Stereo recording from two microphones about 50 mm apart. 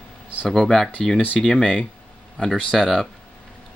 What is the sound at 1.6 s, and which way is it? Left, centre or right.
Speech, left.